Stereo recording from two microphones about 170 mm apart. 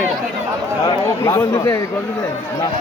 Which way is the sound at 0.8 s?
20° left (ahead or behind).